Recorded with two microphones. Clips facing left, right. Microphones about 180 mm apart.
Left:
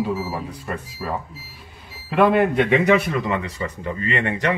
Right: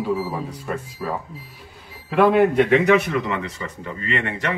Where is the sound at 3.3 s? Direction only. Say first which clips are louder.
Left 2 dB; 20° left (ahead or behind).